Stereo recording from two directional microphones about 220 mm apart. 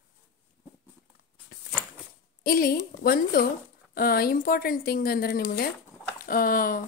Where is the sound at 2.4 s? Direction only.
40° left (ahead or behind).